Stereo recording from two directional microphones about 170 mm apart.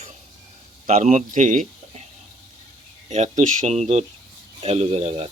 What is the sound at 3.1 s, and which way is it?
Speech, 45° right (ahead or behind).